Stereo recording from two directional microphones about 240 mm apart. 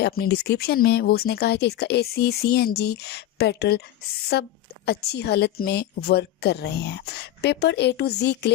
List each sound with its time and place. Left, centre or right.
0.0 s a woman's voice: left